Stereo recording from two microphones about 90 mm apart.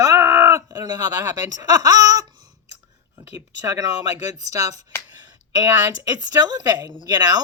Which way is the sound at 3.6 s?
35° right (ahead or behind).